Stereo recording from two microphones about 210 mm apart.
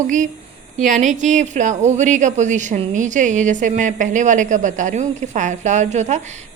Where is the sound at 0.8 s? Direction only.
35° right (ahead or behind).